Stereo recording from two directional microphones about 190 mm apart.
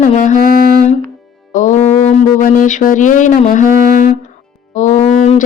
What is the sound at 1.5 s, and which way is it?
Music, 40° left (ahead or behind).